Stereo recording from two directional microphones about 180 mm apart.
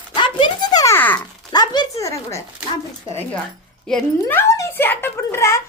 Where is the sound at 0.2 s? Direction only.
25° left (ahead or behind); by 1.2 s 10° left (ahead or behind).